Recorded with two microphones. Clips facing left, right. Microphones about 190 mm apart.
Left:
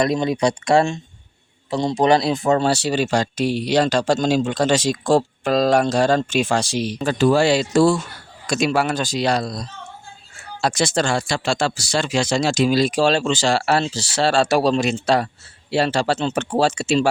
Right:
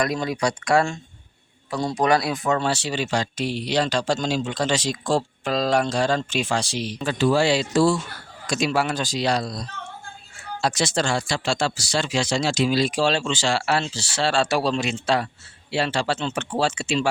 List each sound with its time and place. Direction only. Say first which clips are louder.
0.0 s speech: left 5 dB; 25° left (ahead or behind); by 17.1 s 40° left (ahead or behind)